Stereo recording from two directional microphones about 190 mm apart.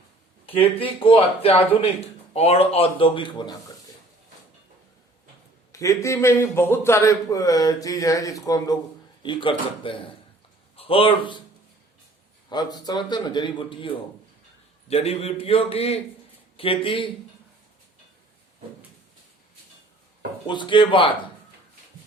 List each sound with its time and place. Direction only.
0.8 s speech: 30° left (ahead or behind)
5.7 s a man's voice: 15° left (ahead or behind)
12.5 s a man's voice: 20° left (ahead or behind)
20.5 s a man's voice: 25° left (ahead or behind)